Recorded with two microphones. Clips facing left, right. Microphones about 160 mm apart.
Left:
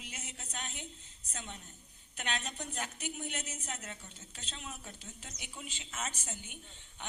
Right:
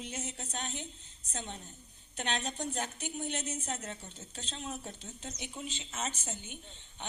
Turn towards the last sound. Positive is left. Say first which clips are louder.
# right 4 dB
turn(degrees=-25)  # may be behind; listen again after turning